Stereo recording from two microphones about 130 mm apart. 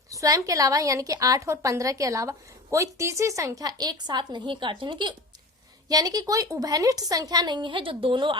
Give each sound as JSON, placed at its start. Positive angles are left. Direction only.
{"t": 0.1, "sound": "a woman's voice", "side_deg": -25}